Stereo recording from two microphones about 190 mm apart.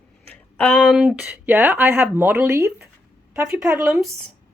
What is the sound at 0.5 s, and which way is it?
Speech, 5° left (ahead or behind).